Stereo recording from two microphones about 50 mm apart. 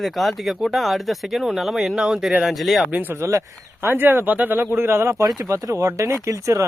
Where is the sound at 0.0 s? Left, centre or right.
Centre.